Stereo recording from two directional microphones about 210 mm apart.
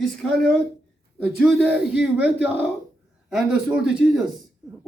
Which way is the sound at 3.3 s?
5° right (ahead or behind).